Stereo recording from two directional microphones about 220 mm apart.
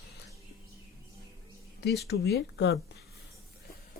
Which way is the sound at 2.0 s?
45° left (ahead or behind).